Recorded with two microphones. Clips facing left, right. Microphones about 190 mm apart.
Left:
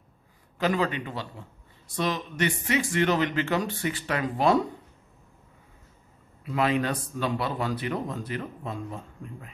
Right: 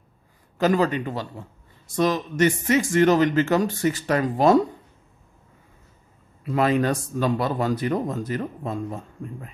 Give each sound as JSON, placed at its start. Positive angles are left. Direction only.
{"t": 0.6, "sound": "speech", "side_deg": -40}
{"t": 6.4, "sound": "speech", "side_deg": -45}